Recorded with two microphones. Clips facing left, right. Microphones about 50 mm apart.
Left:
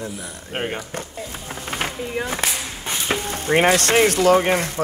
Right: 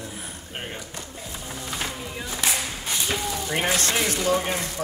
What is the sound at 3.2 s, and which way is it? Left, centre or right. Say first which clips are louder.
Speech: left 8 dB; left.